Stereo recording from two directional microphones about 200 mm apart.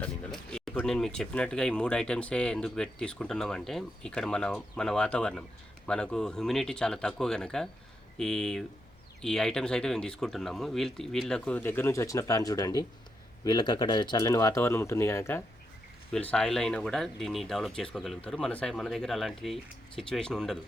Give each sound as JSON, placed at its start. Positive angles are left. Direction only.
{"t": 0.0, "sound": "speech", "side_deg": 5}
{"t": 16.3, "sound": "speech", "side_deg": 5}